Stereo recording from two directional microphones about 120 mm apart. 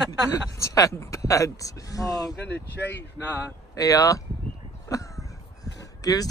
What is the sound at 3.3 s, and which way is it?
Speech, 15° left (ahead or behind).